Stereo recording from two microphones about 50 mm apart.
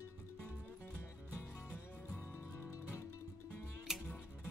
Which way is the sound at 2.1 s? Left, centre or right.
Left.